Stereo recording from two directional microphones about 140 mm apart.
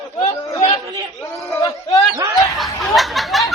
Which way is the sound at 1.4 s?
20° left (ahead or behind).